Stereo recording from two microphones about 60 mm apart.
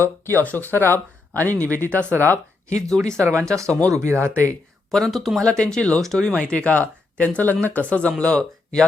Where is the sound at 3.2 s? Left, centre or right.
Right.